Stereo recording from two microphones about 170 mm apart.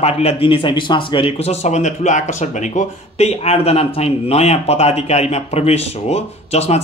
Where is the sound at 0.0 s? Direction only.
40° left (ahead or behind).